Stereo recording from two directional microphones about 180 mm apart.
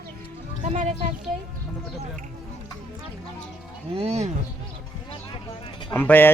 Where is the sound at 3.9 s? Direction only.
35° right (ahead or behind).